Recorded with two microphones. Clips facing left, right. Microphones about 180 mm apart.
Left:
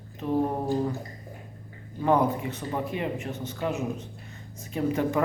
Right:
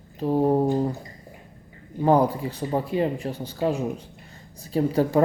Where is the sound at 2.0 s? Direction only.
35° right (ahead or behind).